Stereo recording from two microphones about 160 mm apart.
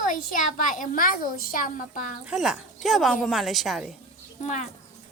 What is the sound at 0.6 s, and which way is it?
A woman's voice, 55° left (ahead or behind).